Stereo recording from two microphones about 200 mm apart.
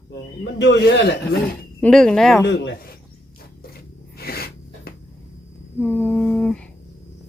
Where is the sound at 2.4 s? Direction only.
65° left (ahead or behind).